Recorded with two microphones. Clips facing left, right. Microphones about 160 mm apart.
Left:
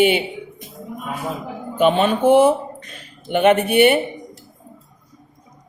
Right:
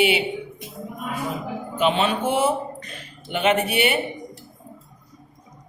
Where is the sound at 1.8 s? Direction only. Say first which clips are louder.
Left 5 dB; 50° left (ahead or behind).